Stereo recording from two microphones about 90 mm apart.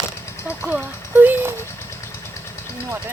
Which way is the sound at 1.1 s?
20° right (ahead or behind).